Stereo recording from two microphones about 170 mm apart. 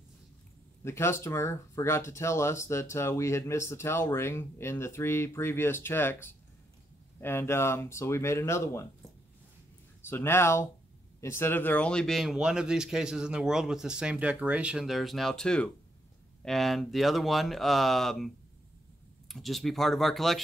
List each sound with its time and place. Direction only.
0.8 s speech: 15° left (ahead or behind)
10.0 s speech: 15° left (ahead or behind)